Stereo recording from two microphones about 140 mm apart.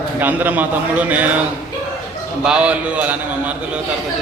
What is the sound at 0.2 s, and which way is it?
A man's voice, 10° right (ahead or behind).